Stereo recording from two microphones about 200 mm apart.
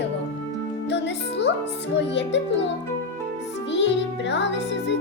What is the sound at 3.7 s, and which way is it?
Music, 60° left (ahead or behind).